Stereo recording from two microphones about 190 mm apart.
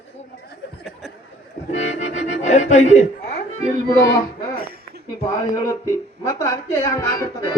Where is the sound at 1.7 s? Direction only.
35° left (ahead or behind).